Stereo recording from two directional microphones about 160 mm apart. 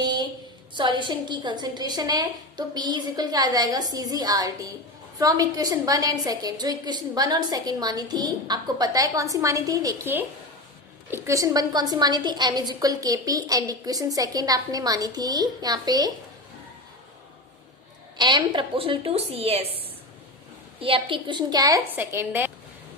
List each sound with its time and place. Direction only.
0.0 s a sound: 25° right (ahead or behind)
0.7 s a woman's voice: 30° right (ahead or behind)
18.2 s a woman's voice: 30° right (ahead or behind); by 22.5 s 15° right (ahead or behind)